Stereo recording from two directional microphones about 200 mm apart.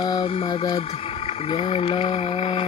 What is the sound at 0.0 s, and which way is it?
Speech, 25° left (ahead or behind).